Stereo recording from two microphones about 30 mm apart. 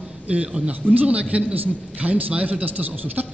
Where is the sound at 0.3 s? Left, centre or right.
Right.